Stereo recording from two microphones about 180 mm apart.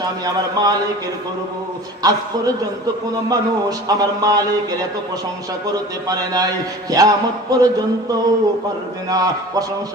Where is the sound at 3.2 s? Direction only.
20° right (ahead or behind).